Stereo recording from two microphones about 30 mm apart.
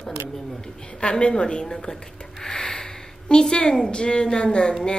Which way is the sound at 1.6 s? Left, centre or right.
Centre.